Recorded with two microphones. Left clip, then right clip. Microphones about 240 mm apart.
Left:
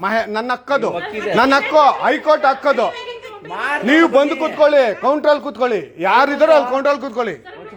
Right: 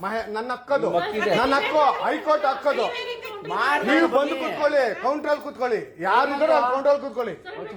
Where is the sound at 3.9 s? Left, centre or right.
Left.